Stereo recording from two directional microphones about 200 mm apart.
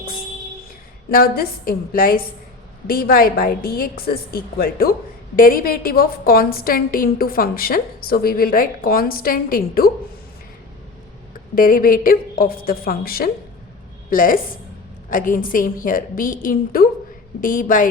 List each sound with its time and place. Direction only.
1.1 s a woman's voice: 45° left (ahead or behind)
11.5 s a woman's voice: 45° left (ahead or behind)